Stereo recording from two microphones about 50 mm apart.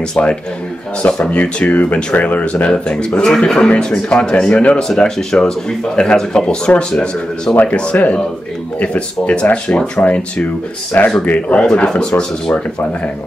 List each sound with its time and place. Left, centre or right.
0.1 s speech: left
4.8 s speech: centre; by 11.6 s left
11.6 s speech: centre